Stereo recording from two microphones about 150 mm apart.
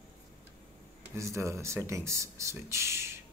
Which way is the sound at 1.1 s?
20° right (ahead or behind).